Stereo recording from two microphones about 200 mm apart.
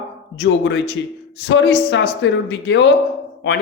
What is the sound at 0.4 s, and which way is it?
Speech, 65° left (ahead or behind).